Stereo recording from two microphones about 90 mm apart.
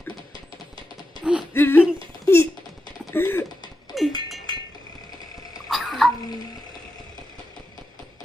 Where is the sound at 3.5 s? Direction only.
50° left (ahead or behind).